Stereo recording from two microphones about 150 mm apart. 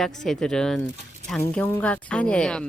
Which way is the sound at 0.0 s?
Centre (ahead or behind).